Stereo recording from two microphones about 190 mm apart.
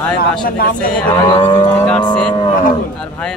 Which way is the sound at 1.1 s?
25° left (ahead or behind).